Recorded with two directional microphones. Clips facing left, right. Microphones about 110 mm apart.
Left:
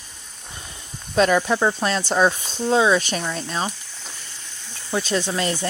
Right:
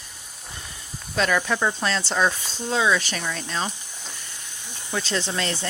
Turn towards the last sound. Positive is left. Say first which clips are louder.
# left 4 dB
turn(degrees=15)  # may be behind; listen again after turning